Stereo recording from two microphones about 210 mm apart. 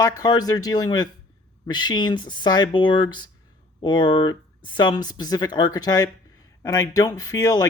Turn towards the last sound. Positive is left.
turn(degrees=15)  # may be behind; listen again after turning